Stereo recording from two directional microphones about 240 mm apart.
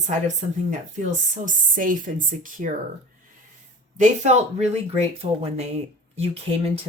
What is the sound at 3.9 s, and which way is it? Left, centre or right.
Speech, right.